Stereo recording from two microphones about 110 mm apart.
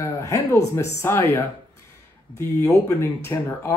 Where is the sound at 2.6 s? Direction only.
25° left (ahead or behind).